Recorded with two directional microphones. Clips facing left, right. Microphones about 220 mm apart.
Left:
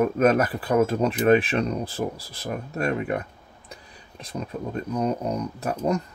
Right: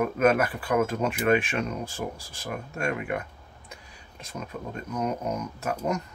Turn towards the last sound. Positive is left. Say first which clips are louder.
# left 4 dB
turn(degrees=35)  # may be behind; listen again after turning